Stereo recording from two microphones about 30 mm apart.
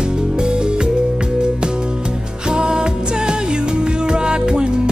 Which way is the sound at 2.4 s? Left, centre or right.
Right.